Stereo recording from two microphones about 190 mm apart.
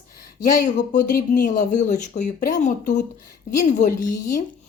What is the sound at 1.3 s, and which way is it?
Speech, 40° left (ahead or behind).